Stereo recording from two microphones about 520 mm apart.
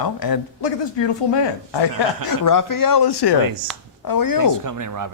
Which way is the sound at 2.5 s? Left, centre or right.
Left.